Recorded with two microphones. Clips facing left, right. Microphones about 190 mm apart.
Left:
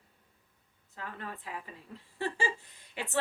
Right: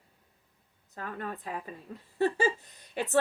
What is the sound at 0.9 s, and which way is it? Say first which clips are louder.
Speech: right 5 dB; 45° right (ahead or behind).